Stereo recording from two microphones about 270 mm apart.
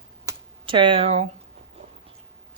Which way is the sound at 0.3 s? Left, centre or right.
Centre.